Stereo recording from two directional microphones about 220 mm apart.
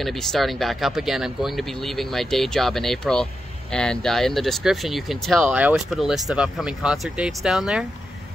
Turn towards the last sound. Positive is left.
turn(degrees=0)  # may be behind; listen again after turning